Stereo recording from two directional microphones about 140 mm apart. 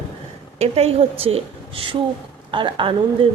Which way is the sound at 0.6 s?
45° right (ahead or behind).